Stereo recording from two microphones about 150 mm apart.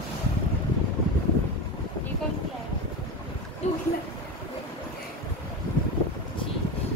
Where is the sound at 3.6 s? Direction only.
50° left (ahead or behind).